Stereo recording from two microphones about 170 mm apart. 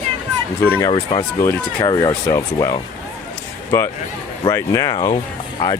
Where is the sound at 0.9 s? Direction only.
25° left (ahead or behind).